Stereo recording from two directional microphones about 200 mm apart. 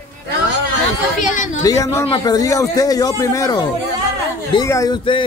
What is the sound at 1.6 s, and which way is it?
Speech, 15° left (ahead or behind).